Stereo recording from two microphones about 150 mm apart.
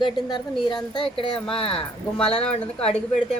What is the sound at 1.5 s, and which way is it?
Speech, 35° left (ahead or behind).